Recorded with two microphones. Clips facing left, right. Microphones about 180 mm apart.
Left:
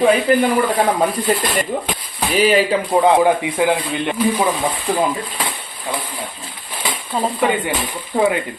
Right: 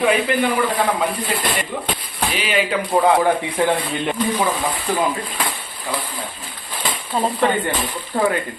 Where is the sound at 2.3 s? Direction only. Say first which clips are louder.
Left 8 dB; 35° left (ahead or behind).